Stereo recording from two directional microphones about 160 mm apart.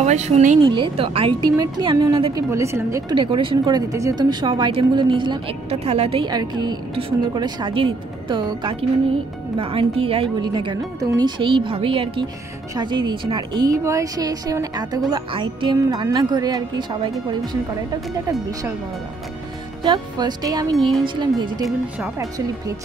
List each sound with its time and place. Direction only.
0.0 s speech: 45° right (ahead or behind)
0.6 s speech: 30° right (ahead or behind)
2.3 s speech: 20° right (ahead or behind)
3.2 s speech: 30° right (ahead or behind)
19.8 s speech: 25° right (ahead or behind)